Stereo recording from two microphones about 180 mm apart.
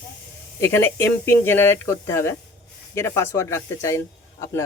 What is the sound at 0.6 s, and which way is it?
Speech, 10° left (ahead or behind).